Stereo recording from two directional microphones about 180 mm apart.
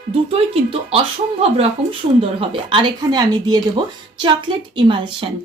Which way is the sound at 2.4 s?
30° right (ahead or behind).